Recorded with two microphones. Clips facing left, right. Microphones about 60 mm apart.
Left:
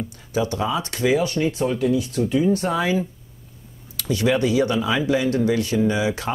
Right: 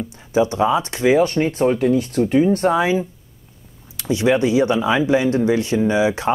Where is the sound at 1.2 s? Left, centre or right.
Right.